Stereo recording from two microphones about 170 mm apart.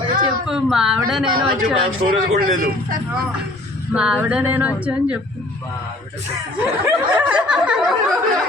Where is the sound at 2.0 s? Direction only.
55° right (ahead or behind).